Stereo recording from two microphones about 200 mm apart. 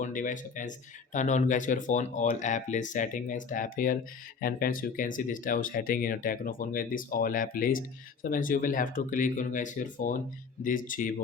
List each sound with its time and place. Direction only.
0.0 s speech: 40° left (ahead or behind)